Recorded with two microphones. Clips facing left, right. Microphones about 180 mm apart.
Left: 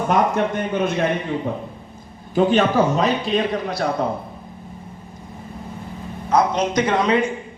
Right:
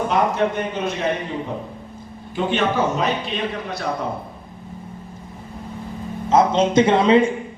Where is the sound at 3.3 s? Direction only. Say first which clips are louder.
Left 5 dB; 40° left (ahead or behind).